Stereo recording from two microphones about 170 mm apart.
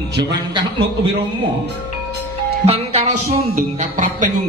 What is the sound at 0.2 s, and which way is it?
Speech, 25° right (ahead or behind).